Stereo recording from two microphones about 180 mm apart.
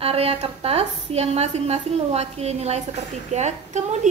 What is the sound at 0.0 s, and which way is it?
A woman's voice, 35° right (ahead or behind).